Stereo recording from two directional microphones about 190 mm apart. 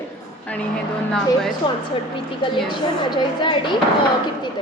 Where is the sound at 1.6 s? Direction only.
25° left (ahead or behind).